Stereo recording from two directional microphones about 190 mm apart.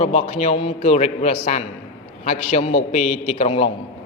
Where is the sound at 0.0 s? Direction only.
35° left (ahead or behind).